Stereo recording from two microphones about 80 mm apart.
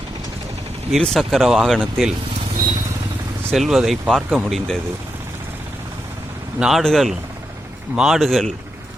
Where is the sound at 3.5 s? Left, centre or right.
Centre.